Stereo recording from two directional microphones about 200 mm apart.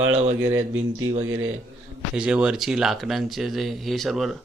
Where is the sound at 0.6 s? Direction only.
90° right.